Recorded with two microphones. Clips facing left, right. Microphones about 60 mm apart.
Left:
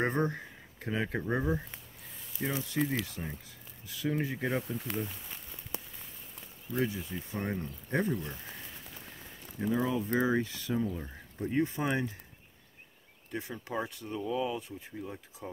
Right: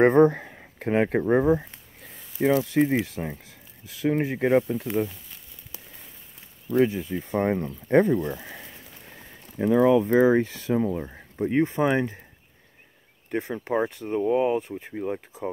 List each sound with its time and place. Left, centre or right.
0.1 s speech: right
0.5 s a sound: right
1.4 s speech: right
2.4 s speech: right
2.7 s speech: right
4.0 s speech: right
5.7 s a sound: left
6.7 s speech: centre
7.2 s speech: right
7.5 s speech: right
10.0 s speech: right
13.3 s speech: right